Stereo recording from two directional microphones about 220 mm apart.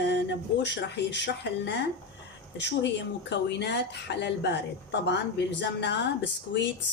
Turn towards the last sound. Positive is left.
turn(degrees=50)  # may be behind; listen again after turning